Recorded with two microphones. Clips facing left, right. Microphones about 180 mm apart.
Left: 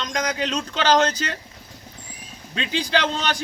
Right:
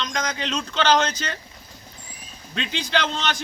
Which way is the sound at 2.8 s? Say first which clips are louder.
Left 3 dB; 35° left (ahead or behind).